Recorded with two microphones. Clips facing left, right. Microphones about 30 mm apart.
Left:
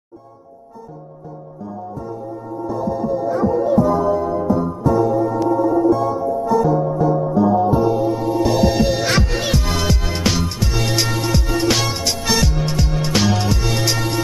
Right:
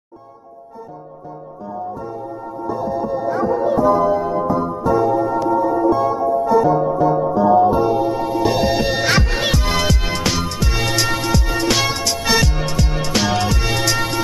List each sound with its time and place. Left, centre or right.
1.7 s music: centre
7.3 s music: centre
10.7 s music: centre
12.6 s music: centre